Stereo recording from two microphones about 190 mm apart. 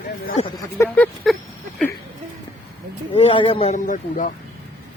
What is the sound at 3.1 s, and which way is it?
Speech, 30° left (ahead or behind).